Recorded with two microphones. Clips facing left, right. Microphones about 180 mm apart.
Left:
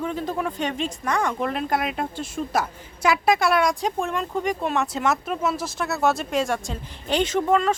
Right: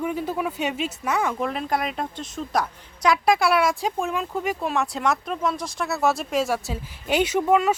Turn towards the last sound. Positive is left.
turn(degrees=-10)  # may be behind; listen again after turning